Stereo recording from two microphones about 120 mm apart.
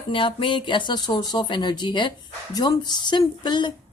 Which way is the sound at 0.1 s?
50° left (ahead or behind).